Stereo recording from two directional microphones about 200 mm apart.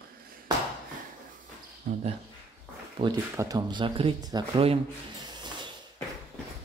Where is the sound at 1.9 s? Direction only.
40° right (ahead or behind).